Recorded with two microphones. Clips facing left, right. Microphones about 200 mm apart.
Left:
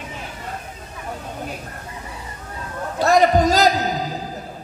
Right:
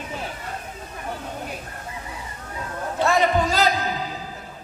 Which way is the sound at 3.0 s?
40° left (ahead or behind).